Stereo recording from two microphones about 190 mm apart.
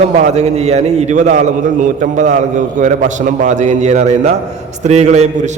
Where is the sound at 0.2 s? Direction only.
35° right (ahead or behind).